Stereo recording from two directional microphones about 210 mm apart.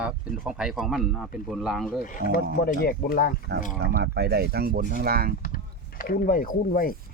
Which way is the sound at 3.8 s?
50° right (ahead or behind).